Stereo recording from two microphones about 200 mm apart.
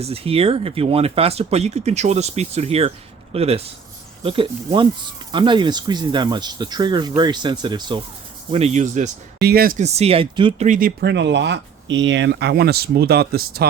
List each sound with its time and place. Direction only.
0.0 s speech: 30° right (ahead or behind)
8.5 s speech: 35° right (ahead or behind)
9.4 s speech: 50° right (ahead or behind); by 10.7 s 25° right (ahead or behind)
10.7 s speech: 45° right (ahead or behind)